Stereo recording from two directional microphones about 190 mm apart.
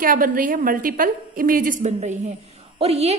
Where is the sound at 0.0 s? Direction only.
45° right (ahead or behind).